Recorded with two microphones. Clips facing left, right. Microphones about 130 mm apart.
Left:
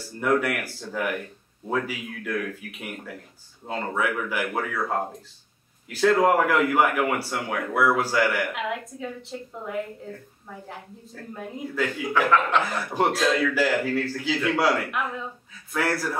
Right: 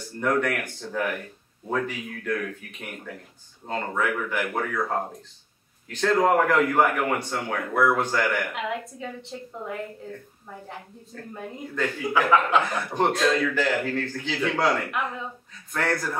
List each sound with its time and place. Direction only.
0.2 s a man's voice: 5° left (ahead or behind)
3.6 s a man's voice: 5° left (ahead or behind)
11.3 s a man's voice: centre (ahead or behind)